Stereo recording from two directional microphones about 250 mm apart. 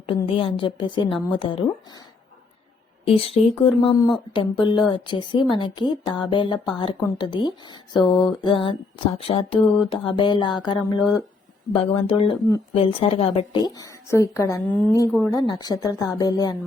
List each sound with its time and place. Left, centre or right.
0.0 s speech: left
3.0 s a woman's voice: left